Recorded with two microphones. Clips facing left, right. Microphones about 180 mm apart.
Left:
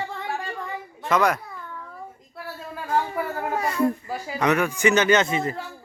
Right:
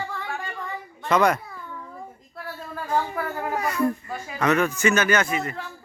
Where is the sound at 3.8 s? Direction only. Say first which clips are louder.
Left 2 dB; 35° left (ahead or behind).